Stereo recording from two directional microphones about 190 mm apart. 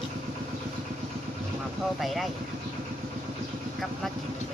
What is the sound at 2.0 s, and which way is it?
Speech, centre (ahead or behind).